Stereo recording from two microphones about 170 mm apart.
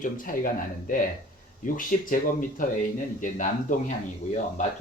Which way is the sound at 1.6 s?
50° left (ahead or behind).